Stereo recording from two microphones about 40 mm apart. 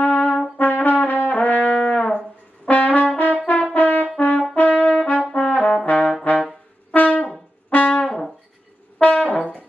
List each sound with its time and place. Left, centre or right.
0.0 s trumpet: left
2.6 s brass instrument: left
8.9 s brass instrument: left